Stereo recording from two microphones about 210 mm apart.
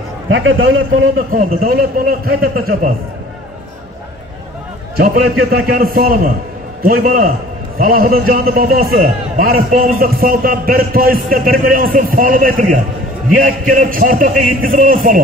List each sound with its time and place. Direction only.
0.3 s a man's voice: 65° right (ahead or behind)
1.3 s a man's voice: 45° right (ahead or behind)
4.9 s a man's voice: 45° right (ahead or behind)